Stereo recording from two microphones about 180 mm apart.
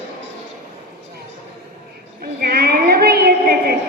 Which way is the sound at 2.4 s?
60° right (ahead or behind).